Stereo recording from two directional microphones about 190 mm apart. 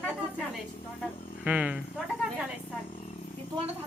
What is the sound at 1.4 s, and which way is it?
Speech, 5° right (ahead or behind).